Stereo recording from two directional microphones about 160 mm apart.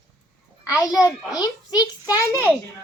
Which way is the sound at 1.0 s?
25° left (ahead or behind).